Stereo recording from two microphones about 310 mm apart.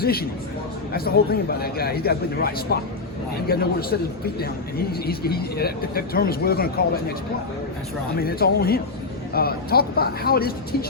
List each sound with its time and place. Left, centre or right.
0.0 s a man's voice: left
8.2 s speech: left